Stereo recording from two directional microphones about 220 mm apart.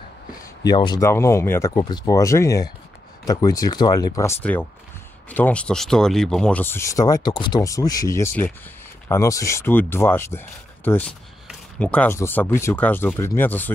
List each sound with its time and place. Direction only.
0.7 s speech: 20° left (ahead or behind)